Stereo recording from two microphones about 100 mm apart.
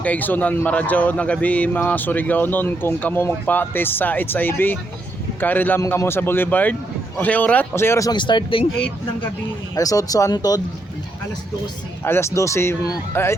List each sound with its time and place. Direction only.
0.0 s speech: 15° left (ahead or behind)
8.1 s speech: 50° left (ahead or behind)
9.7 s speech: 35° left (ahead or behind)
12.0 s speech: 25° left (ahead or behind)